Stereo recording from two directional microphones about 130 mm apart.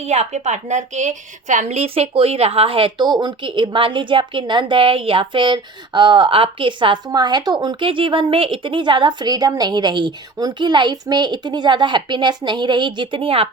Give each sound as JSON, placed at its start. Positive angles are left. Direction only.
{"t": 0.0, "sound": "a woman's voice", "side_deg": -60}